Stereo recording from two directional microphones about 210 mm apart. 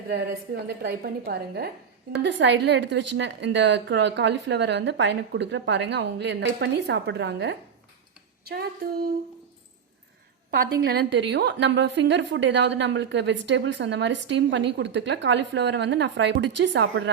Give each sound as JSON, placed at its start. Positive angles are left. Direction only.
{"t": 0.1, "sound": "a woman's voice", "side_deg": -50}
{"t": 10.5, "sound": "a woman's voice", "side_deg": -50}